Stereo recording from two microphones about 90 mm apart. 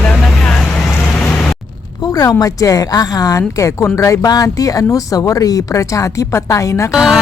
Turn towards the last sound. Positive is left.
turn(degrees=-5)  # may be behind; listen again after turning